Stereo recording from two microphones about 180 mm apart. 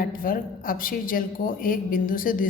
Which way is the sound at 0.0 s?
50° left (ahead or behind).